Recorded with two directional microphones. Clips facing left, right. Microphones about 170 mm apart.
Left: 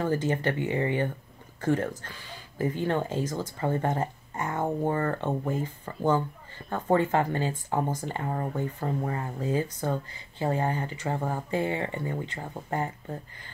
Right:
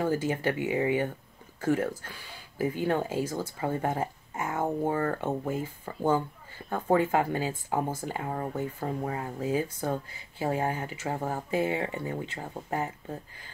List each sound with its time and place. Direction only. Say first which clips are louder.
0.0 s speech: left 1 dB; 10° right (ahead or behind)